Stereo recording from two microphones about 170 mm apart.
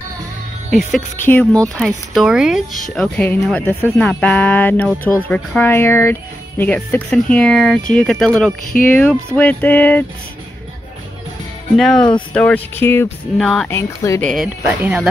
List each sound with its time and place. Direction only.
0.7 s speech: centre (ahead or behind)
1.2 s music: 10° left (ahead or behind)
1.8 s speech: centre (ahead or behind)
2.9 s music: 10° left (ahead or behind)
3.4 s speech: 5° left (ahead or behind)
4.0 s music: 5° left (ahead or behind)
6.6 s speech: 10° left (ahead or behind)
8.8 s music: 10° left (ahead or behind)
11.7 s speech: centre (ahead or behind)
12.4 s music: 10° left (ahead or behind)
13.4 s speech: 5° left (ahead or behind)
13.7 s music: 15° left (ahead or behind)
14.2 s speech: centre (ahead or behind)
14.8 s speech: 10° right (ahead or behind)